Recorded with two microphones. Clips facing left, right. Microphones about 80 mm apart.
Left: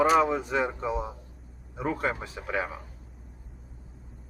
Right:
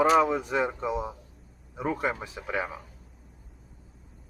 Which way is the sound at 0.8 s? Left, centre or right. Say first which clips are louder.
Even; centre.